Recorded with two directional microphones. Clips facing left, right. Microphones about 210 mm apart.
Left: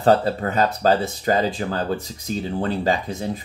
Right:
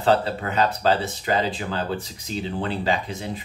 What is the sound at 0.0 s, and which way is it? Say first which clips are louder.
Speech: left 3 dB; 40° left (ahead or behind).